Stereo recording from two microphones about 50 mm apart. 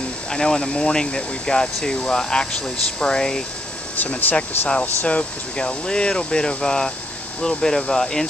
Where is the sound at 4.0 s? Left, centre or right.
Left.